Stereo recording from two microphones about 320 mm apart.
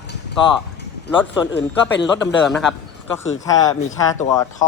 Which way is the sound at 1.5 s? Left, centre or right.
Left.